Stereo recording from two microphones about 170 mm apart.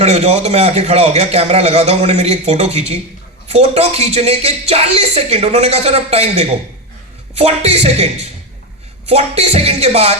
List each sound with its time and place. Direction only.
0.0 s a woman's voice: 40° right (ahead or behind)